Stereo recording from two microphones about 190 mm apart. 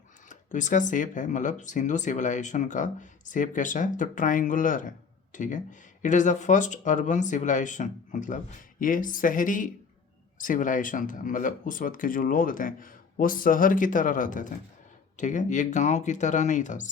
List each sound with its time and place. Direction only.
0.3 s speech: 40° left (ahead or behind)